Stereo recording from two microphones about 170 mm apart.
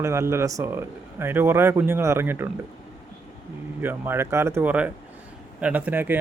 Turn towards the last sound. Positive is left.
turn(degrees=-10)  # may be behind; listen again after turning